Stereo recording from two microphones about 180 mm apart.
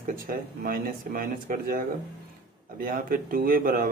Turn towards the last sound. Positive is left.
turn(degrees=-50)  # may be behind; listen again after turning